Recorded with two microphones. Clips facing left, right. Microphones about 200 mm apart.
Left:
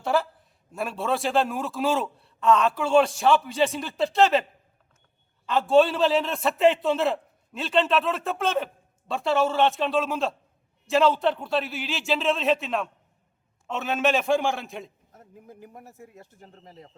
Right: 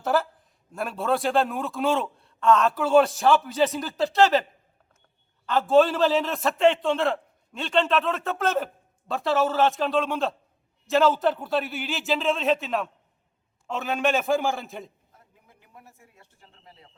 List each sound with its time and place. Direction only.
0.0 s a woman's voice: centre (ahead or behind)
5.5 s a man's voice: centre (ahead or behind)
15.1 s speech: 45° left (ahead or behind)